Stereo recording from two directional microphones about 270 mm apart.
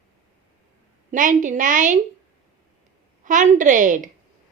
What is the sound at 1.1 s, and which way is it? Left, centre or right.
Speech, right.